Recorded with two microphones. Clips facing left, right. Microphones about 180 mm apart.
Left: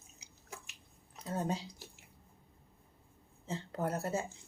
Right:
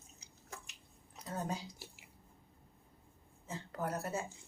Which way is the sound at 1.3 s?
25° left (ahead or behind).